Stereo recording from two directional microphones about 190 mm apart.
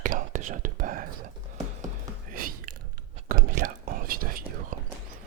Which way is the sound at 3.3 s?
50° right (ahead or behind).